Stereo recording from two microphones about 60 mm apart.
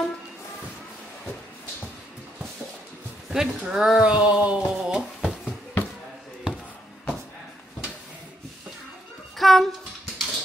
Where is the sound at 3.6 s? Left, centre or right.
Centre.